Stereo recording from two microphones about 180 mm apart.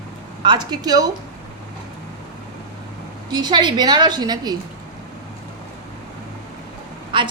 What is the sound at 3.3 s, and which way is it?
A woman's voice, 25° right (ahead or behind).